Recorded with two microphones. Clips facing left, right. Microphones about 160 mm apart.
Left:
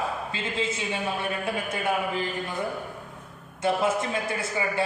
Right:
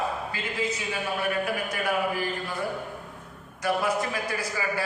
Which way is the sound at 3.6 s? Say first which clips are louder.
Left 2 dB; 25° left (ahead or behind).